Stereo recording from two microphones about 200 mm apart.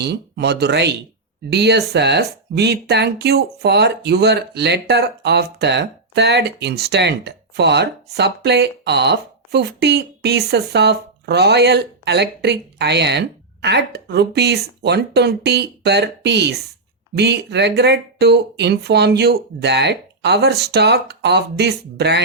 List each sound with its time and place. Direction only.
0.0 s speech: 55° right (ahead or behind)